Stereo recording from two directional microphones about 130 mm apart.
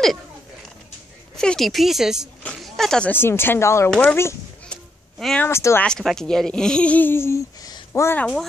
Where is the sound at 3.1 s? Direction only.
15° left (ahead or behind).